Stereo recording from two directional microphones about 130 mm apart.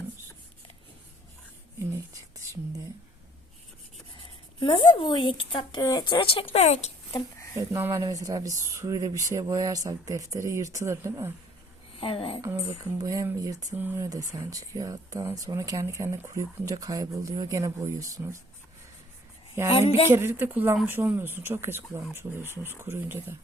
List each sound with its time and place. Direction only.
4.2 s speech: 40° left (ahead or behind)
5.8 s speech: 30° left (ahead or behind); by 6.9 s 55° left (ahead or behind)
7.5 s speech: 20° right (ahead or behind)
11.9 s speech: 45° left (ahead or behind)
12.4 s speech: 25° right (ahead or behind)
13.7 s speech: 15° right (ahead or behind)
14.1 s speech: 25° right (ahead or behind)
19.6 s speech: 20° right (ahead or behind)
22.4 s speech: 15° left (ahead or behind)
22.8 s speech: 20° right (ahead or behind)